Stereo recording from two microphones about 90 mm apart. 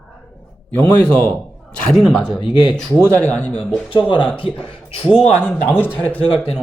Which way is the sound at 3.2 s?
15° left (ahead or behind).